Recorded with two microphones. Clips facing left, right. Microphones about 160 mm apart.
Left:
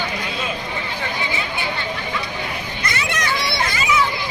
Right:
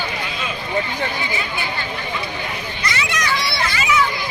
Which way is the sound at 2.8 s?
50° left (ahead or behind).